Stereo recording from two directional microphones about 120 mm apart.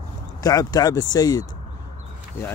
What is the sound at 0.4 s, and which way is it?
Speech, 30° left (ahead or behind).